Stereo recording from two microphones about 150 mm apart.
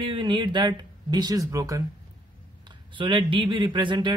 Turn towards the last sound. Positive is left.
turn(degrees=-30)  # may be behind; listen again after turning